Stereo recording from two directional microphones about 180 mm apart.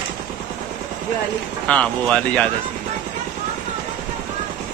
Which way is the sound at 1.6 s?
5° left (ahead or behind).